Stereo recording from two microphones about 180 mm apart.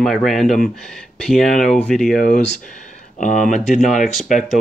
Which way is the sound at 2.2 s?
50° left (ahead or behind).